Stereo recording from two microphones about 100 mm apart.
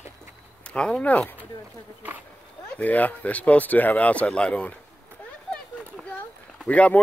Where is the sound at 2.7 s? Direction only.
15° left (ahead or behind).